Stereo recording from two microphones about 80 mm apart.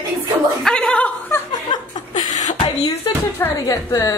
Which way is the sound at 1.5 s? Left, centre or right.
Left.